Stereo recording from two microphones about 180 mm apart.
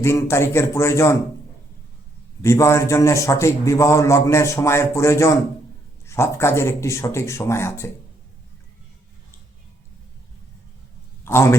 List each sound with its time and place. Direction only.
0.0 s a man's voice: 15° left (ahead or behind)
2.4 s a man's voice: 15° left (ahead or behind)
11.2 s a sound: 15° left (ahead or behind)